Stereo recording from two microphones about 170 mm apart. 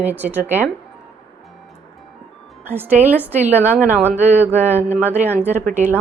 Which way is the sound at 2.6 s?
10° right (ahead or behind).